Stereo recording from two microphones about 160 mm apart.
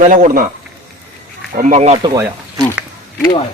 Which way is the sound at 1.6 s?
45° right (ahead or behind).